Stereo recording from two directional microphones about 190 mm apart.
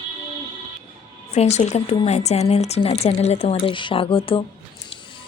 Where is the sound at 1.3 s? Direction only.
35° left (ahead or behind).